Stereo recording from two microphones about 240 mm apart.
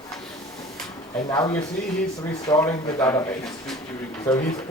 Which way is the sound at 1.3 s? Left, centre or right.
Centre.